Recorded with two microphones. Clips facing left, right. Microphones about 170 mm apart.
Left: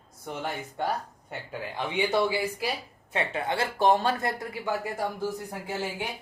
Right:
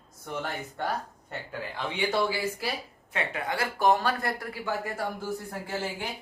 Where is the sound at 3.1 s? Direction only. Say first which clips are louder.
Left 2 dB; 25° left (ahead or behind).